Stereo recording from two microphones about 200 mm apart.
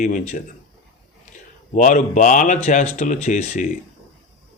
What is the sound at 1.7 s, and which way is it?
Speech, 40° left (ahead or behind).